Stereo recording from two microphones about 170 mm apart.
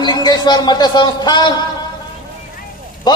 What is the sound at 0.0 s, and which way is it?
A man's voice, 25° left (ahead or behind).